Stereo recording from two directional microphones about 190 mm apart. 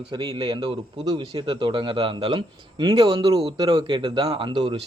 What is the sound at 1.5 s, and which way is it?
Speech, 25° right (ahead or behind).